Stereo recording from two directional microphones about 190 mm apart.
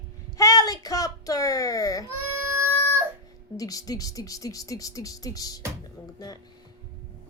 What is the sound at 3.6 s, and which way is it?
Speech, 20° left (ahead or behind).